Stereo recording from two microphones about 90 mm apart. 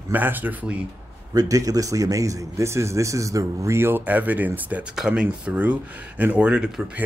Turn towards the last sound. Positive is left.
turn(degrees=-10)  # may be behind; listen again after turning